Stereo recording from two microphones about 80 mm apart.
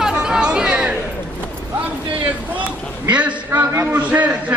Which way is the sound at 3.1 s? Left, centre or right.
Centre.